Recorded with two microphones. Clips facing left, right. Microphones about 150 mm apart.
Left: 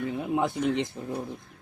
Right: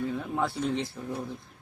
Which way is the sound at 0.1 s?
15° left (ahead or behind).